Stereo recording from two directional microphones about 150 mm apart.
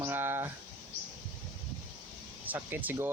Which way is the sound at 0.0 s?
15° right (ahead or behind).